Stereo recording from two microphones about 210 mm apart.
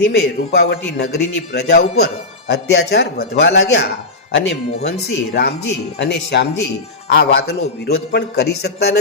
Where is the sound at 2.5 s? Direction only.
55° left (ahead or behind).